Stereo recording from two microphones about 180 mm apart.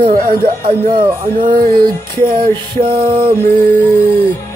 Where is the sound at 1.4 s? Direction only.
50° right (ahead or behind).